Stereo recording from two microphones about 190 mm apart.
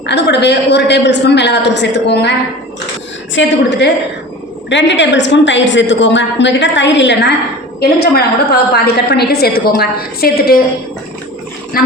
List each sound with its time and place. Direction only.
0.0 s a woman's voice: 65° left (ahead or behind)
3.3 s a woman's voice: 70° left (ahead or behind)
7.8 s a woman's voice: 55° left (ahead or behind)
11.7 s speech: 50° left (ahead or behind)